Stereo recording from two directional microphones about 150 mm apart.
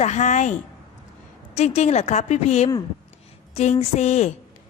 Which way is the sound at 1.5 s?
45° left (ahead or behind).